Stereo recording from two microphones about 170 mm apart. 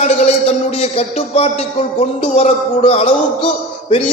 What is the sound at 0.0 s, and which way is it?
A man's voice, 40° left (ahead or behind).